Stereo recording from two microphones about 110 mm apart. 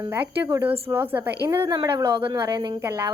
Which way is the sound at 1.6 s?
40° right (ahead or behind).